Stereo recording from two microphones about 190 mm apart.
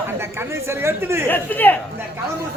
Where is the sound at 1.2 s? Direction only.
10° left (ahead or behind).